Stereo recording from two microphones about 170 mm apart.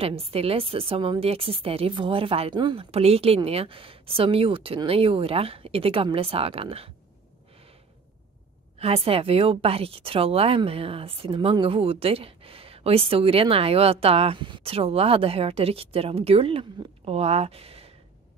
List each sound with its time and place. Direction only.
0.0 s a woman's voice: 35° right (ahead or behind)
8.7 s a woman's voice: 35° right (ahead or behind)